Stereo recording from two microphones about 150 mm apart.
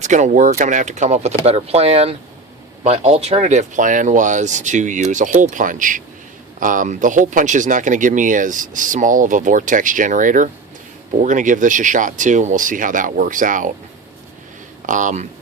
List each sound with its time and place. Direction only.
0.0 s speech: 55° right (ahead or behind)
14.8 s speech: 55° right (ahead or behind)